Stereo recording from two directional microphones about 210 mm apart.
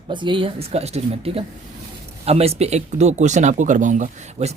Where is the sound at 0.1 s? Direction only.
20° right (ahead or behind).